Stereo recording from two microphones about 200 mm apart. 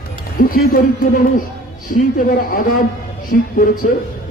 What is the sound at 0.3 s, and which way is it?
Music, 45° left (ahead or behind).